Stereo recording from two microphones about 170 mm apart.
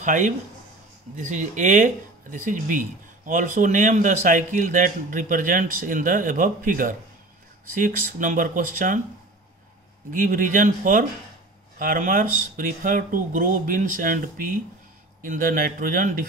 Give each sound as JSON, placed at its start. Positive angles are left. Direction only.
{"t": 0.0, "sound": "speech", "side_deg": -45}
{"t": 10.1, "sound": "a man's voice", "side_deg": -50}